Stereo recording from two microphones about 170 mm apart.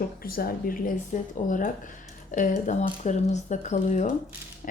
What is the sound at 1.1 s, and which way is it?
Speech, 50° left (ahead or behind).